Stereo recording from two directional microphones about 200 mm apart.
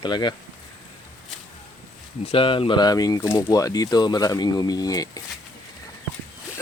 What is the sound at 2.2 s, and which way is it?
Speech, 25° left (ahead or behind).